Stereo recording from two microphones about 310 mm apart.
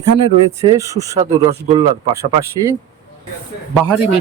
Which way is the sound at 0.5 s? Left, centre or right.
Centre.